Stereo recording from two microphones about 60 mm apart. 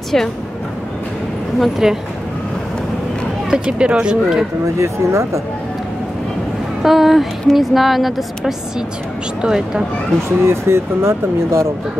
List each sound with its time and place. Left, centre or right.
0.1 s a woman's voice: centre
1.8 s speech: centre
3.6 s speech: centre
4.7 s speech: right
6.8 s a woman's voice: centre
10.4 s speech: right